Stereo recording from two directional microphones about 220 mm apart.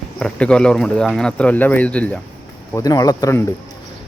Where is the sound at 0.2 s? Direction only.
5° left (ahead or behind).